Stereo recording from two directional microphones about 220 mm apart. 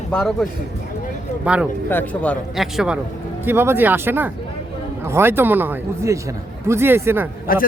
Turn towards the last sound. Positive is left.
turn(degrees=40)  # may be behind; listen again after turning